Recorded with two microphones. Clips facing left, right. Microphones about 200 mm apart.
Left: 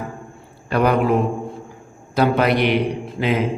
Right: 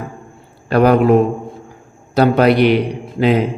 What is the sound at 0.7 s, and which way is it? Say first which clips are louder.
Speech: right 6 dB; 40° right (ahead or behind).